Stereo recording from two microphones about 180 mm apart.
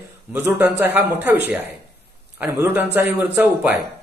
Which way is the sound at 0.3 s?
10° right (ahead or behind).